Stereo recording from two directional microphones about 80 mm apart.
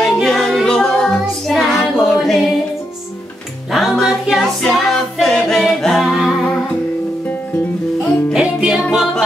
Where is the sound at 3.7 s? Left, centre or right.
Centre.